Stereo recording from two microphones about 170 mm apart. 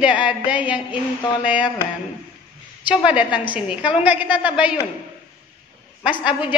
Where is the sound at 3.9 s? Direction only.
10° right (ahead or behind).